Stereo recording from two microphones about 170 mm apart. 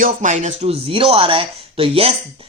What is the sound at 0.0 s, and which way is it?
Speech, 45° right (ahead or behind).